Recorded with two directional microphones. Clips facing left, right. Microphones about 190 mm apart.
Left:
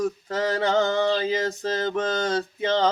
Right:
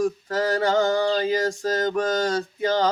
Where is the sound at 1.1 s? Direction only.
40° right (ahead or behind).